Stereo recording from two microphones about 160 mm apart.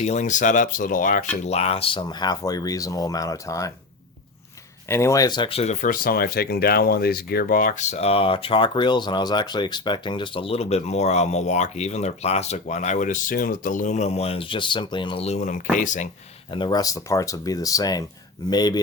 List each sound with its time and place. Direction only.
0.0 s speech: 45° left (ahead or behind)
1.5 s speech: 40° left (ahead or behind); by 3.7 s 20° left (ahead or behind)
4.9 s speech: 15° left (ahead or behind); by 5.7 s 35° left (ahead or behind)
5.8 s speech: 60° left (ahead or behind)
16.5 s speech: 30° left (ahead or behind)